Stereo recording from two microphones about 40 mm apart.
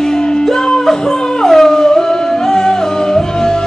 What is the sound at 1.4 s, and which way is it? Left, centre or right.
Howl, centre.